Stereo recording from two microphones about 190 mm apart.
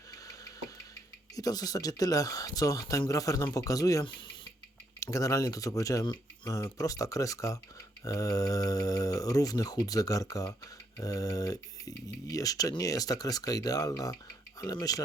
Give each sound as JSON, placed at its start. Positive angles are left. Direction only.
{"t": 0.1, "sound": "engine", "side_deg": 15}
{"t": 1.4, "sound": "speech", "side_deg": 20}